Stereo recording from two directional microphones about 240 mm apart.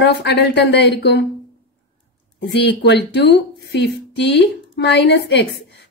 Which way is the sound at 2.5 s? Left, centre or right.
Left.